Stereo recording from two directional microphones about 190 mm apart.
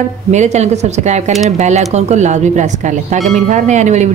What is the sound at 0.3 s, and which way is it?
A woman's voice, 35° right (ahead or behind).